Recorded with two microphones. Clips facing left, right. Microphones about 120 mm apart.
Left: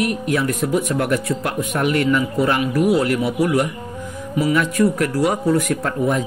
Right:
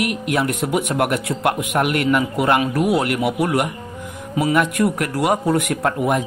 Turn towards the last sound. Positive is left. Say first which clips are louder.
# right 1 dB
turn(degrees=-60)  # may be behind; listen again after turning